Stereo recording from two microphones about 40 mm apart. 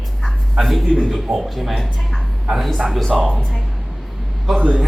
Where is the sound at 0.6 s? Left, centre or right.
Centre.